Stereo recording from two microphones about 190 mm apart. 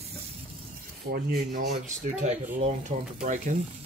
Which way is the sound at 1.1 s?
50° right (ahead or behind).